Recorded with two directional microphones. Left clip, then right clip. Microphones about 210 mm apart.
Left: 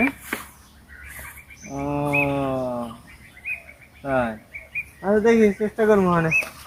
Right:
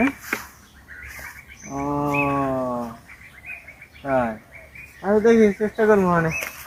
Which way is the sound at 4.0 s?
15° left (ahead or behind).